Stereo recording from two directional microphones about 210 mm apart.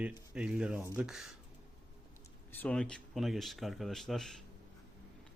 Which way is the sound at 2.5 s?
5° left (ahead or behind).